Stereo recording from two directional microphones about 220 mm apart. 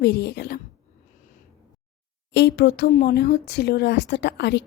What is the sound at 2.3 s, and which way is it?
Speech, 50° left (ahead or behind).